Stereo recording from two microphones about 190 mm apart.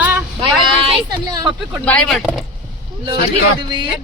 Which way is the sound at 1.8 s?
5° left (ahead or behind).